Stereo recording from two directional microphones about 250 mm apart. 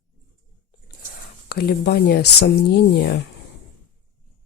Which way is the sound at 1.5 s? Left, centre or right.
Left.